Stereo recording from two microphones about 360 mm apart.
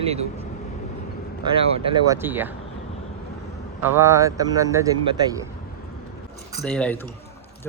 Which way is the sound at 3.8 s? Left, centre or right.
Centre.